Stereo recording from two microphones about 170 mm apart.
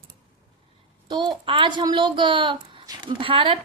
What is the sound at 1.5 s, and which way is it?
A woman's voice, 30° right (ahead or behind).